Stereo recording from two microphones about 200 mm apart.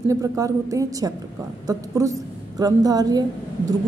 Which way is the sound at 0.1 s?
15° right (ahead or behind).